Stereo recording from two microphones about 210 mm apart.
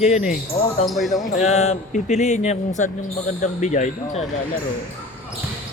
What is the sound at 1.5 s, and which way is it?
Speech, 35° left (ahead or behind).